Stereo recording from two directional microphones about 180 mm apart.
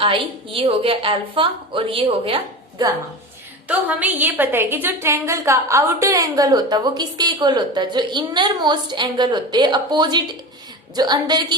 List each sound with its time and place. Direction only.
0.0 s a woman's voice: 30° right (ahead or behind)
3.7 s a woman's voice: 10° right (ahead or behind)